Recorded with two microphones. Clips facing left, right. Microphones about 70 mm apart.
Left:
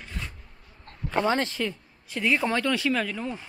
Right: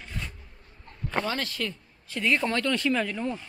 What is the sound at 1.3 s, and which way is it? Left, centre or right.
Speech, left.